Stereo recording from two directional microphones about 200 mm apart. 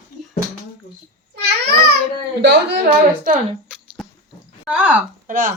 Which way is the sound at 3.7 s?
5° right (ahead or behind).